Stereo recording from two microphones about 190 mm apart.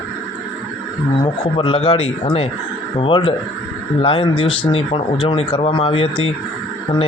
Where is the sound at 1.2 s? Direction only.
25° left (ahead or behind).